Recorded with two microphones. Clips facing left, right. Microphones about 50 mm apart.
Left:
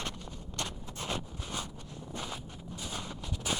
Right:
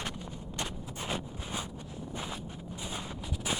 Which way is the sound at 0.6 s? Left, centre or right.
Centre.